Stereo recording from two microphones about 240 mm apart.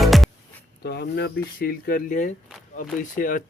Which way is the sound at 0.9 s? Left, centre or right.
Left.